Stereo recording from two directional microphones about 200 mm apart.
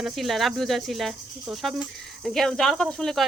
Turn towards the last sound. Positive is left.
turn(degrees=0)  # may be behind; listen again after turning